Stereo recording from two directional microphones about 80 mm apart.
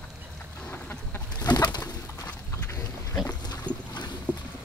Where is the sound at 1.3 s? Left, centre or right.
Left.